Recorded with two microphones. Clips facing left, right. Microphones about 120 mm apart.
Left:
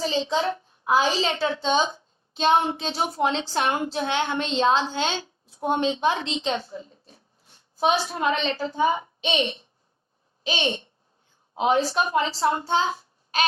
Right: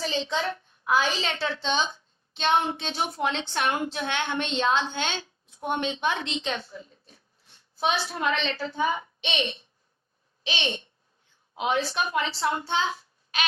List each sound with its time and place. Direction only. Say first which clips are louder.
0.0 s a child's voice: left 4 dB; 30° left (ahead or behind)
1.4 s a woman's voice: left 5 dB; 15° left (ahead or behind)
1.6 s a woman's voice: left 5 dB; 40° left (ahead or behind)
10.4 s a child's voice: left 5 dB; 40° left (ahead or behind)
11.5 s a woman's voice: left 5 dB; 30° left (ahead or behind)
12.6 s child singing: left 4 dB; 30° left (ahead or behind)